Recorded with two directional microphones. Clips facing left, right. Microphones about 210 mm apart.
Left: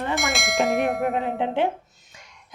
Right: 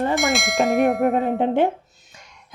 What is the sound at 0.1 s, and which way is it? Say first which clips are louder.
Bell: right 4 dB; centre (ahead or behind).